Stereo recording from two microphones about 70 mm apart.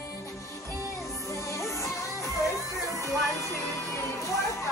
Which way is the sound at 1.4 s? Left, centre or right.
Left.